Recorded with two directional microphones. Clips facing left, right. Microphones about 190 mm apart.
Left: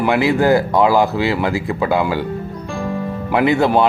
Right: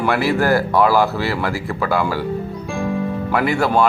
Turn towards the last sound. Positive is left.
turn(degrees=20)  # may be behind; listen again after turning